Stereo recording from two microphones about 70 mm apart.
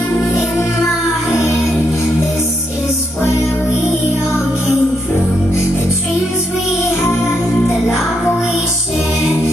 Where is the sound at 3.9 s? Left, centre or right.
Centre.